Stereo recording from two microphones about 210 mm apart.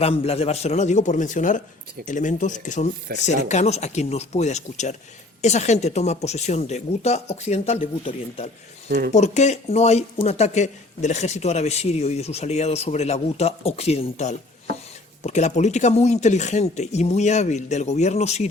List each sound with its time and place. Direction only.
0.0 s speech: 30° left (ahead or behind)
8.9 s speech: 45° right (ahead or behind)
9.1 s speech: 35° left (ahead or behind)